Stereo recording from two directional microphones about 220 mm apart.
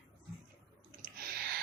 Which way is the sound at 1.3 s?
45° right (ahead or behind).